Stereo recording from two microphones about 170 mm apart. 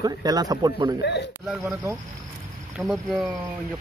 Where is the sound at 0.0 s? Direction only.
20° right (ahead or behind).